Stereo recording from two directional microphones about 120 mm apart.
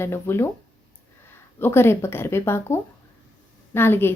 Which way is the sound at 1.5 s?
20° left (ahead or behind).